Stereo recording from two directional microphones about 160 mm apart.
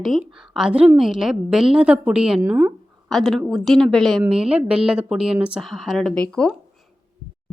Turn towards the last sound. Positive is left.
turn(degrees=5)  # may be behind; listen again after turning